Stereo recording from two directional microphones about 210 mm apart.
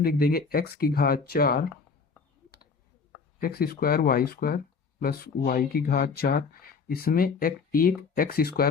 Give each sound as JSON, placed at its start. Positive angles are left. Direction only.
{"t": 0.0, "sound": "speech", "side_deg": 45}
{"t": 3.4, "sound": "speech", "side_deg": 45}